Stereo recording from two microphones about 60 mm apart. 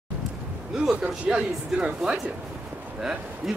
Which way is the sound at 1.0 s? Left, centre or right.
Centre.